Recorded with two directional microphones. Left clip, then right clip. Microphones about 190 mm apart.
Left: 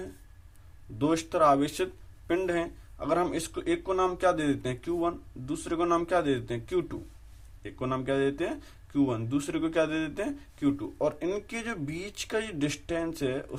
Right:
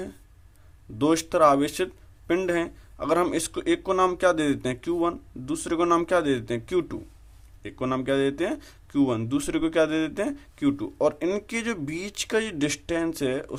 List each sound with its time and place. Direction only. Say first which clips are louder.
0.9 s speech: right 5 dB; 40° right (ahead or behind)